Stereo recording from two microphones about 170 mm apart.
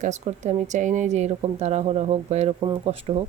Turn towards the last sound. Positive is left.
turn(degrees=-35)  # may be behind; listen again after turning